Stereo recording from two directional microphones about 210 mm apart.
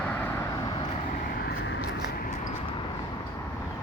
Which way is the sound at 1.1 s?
45° left (ahead or behind).